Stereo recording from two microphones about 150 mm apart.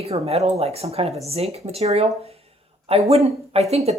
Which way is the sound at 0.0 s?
45° right (ahead or behind).